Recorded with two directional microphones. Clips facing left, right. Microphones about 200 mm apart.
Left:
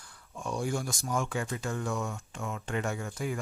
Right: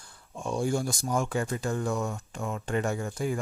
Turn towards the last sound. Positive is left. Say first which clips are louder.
# right 4 dB
turn(degrees=-35)  # may be behind; listen again after turning